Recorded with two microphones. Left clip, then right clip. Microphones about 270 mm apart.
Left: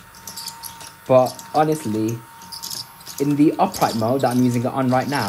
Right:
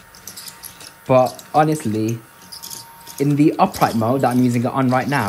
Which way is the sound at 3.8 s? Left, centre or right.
Right.